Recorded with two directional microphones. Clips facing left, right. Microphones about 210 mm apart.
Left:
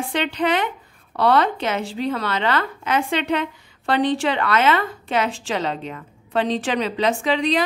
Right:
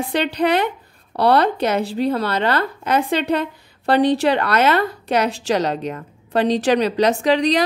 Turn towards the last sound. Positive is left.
turn(degrees=-40)  # may be behind; listen again after turning